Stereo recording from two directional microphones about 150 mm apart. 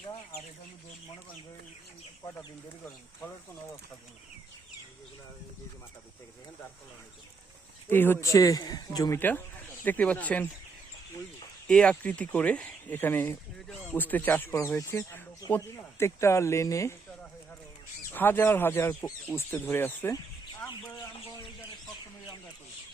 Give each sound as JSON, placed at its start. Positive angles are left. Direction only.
{"t": 7.9, "sound": "speech", "side_deg": 15}
{"t": 9.1, "sound": "speech", "side_deg": 10}
{"t": 11.7, "sound": "speech", "side_deg": 5}
{"t": 18.1, "sound": "speech", "side_deg": 15}